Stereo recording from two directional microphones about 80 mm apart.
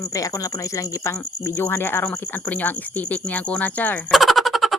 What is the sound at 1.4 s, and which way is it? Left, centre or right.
Speech, left.